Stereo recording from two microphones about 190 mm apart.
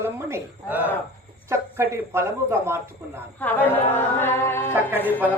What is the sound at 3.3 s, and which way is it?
Music, 10° left (ahead or behind).